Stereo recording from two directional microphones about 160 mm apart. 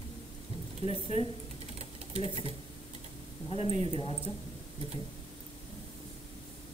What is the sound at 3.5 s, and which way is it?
Speech, 35° left (ahead or behind).